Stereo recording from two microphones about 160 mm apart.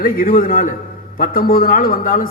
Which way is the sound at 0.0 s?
60° left (ahead or behind).